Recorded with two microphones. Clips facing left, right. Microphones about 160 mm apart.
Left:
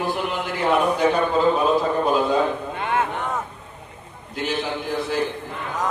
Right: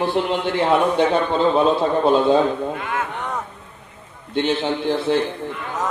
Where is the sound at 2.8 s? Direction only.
30° left (ahead or behind).